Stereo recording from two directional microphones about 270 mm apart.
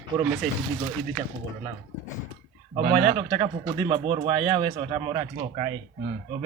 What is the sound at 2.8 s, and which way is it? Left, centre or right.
Speech, right.